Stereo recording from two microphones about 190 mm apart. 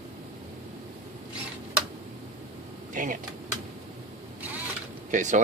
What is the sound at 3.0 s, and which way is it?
Vehicle, 45° right (ahead or behind).